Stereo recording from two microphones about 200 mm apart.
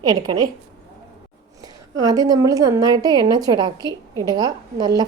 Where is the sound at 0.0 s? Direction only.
20° right (ahead or behind).